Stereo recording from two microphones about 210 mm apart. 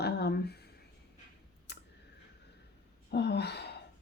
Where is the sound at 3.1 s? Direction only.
50° left (ahead or behind).